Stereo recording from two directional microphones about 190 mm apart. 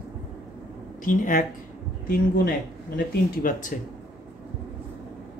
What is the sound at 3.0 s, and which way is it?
Speech, 45° left (ahead or behind).